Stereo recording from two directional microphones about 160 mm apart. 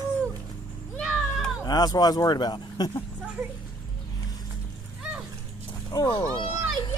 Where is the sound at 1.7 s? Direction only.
25° left (ahead or behind).